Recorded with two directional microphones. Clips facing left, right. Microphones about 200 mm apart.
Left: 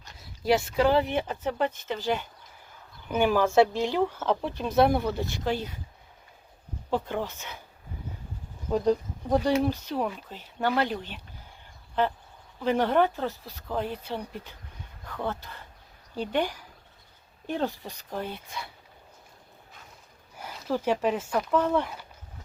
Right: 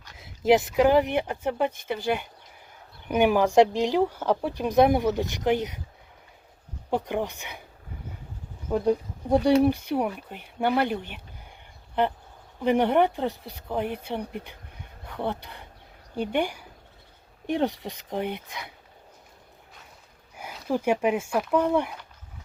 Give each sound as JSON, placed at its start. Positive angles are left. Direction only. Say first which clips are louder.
{"t": 0.8, "sound": "speech", "louder": "right 3 dB", "side_deg": -15}
{"t": 6.9, "sound": "speech", "louder": "right 2 dB", "side_deg": -15}
{"t": 8.7, "sound": "speech", "louder": "right 1 dB", "side_deg": -10}
{"t": 12.5, "sound": "speech", "louder": "right 2 dB", "side_deg": -15}
{"t": 13.3, "sound": "speech", "louder": "right 3 dB", "side_deg": -60}
{"t": 13.6, "sound": "speech", "louder": "right 2 dB", "side_deg": -15}
{"t": 20.3, "sound": "speech", "louder": "right 2 dB", "side_deg": -10}